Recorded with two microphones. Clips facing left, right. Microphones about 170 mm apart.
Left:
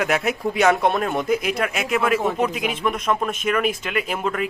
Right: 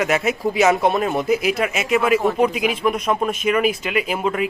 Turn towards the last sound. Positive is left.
turn(degrees=-5)  # may be behind; listen again after turning